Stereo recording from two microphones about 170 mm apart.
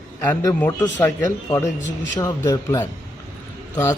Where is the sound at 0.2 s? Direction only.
10° left (ahead or behind).